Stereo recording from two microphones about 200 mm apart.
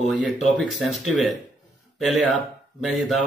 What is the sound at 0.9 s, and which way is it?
Speech, centre (ahead or behind).